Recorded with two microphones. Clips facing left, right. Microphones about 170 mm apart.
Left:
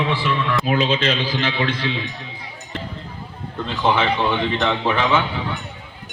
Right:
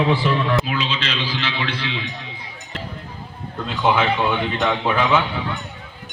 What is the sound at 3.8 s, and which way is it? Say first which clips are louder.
A man's voice: even; 5° right (ahead or behind).